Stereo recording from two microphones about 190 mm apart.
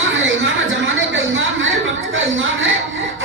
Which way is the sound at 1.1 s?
90° right.